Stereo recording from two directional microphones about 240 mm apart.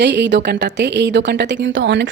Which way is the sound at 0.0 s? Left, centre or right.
Right.